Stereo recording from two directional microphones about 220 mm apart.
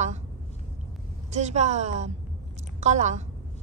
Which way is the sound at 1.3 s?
30° right (ahead or behind).